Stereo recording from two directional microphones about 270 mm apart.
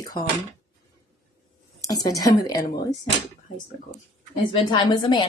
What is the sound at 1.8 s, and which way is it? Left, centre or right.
Speech, centre.